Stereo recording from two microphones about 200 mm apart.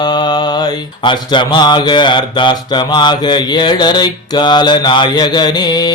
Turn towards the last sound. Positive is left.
turn(degrees=20)  # may be behind; listen again after turning